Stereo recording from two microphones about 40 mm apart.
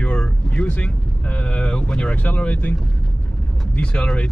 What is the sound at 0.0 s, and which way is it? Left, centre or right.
Vehicle, left.